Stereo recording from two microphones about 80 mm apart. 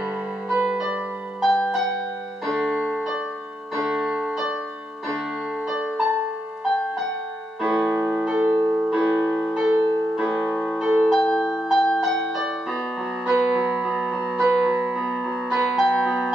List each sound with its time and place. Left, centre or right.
0.5 s music: centre
1.4 s music: centre
5.7 s music: centre
7.6 s music: centre
8.5 s piano: right
8.8 s music: right
9.3 s music: centre
11.1 s music: centre